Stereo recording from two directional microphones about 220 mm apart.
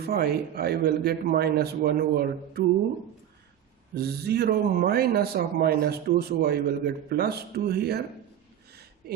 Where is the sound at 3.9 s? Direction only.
45° right (ahead or behind).